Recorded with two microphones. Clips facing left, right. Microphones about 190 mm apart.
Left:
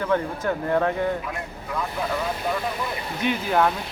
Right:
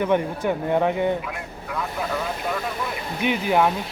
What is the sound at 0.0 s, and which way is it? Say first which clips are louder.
Speech: right 2 dB; 20° right (ahead or behind).